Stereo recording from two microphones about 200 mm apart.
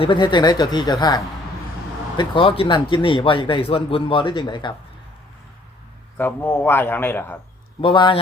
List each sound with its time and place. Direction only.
0.0 s a man's voice: 25° left (ahead or behind)
6.1 s a man's voice: 10° left (ahead or behind)
7.8 s a man's voice: 25° left (ahead or behind)